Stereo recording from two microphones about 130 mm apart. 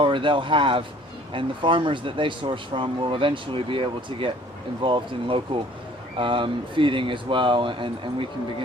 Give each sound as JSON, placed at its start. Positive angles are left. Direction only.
{"t": 0.0, "sound": "speech", "side_deg": -40}